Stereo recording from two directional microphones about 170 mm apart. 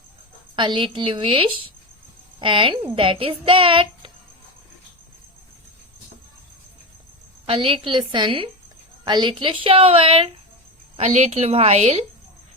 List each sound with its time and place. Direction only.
0.5 s a child's voice: 30° right (ahead or behind)
7.4 s a child's voice: 30° right (ahead or behind)